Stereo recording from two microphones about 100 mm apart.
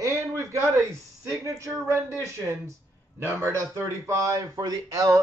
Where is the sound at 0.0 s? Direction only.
30° right (ahead or behind).